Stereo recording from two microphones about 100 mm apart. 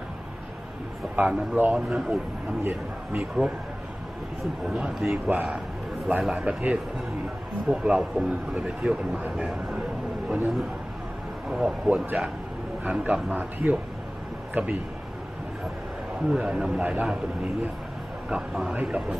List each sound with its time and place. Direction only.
1.1 s a man's voice: 15° right (ahead or behind)
2.6 s a man's voice: 15° right (ahead or behind)
4.6 s a man's voice: 5° right (ahead or behind)
16.2 s a man's voice: 5° right (ahead or behind)
18.3 s a man's voice: 5° right (ahead or behind)